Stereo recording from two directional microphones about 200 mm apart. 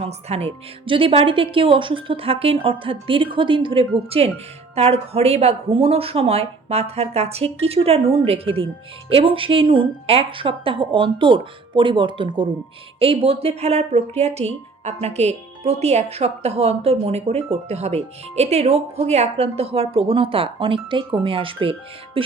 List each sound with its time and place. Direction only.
0.0 s speech: 30° right (ahead or behind)